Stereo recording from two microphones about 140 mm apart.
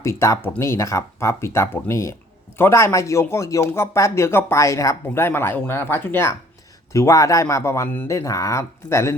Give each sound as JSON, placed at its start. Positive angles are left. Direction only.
{"t": 0.0, "sound": "speech", "side_deg": 20}